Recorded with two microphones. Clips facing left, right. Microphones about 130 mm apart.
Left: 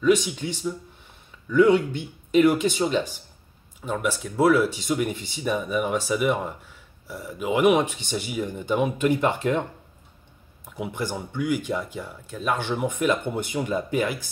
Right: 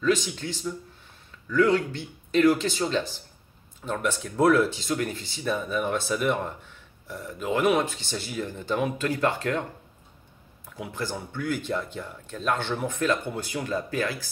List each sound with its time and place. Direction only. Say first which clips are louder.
0.0 s speech: left 4 dB; 15° left (ahead or behind)